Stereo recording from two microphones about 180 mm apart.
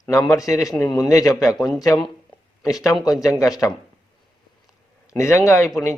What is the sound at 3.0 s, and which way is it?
Speech, 20° left (ahead or behind).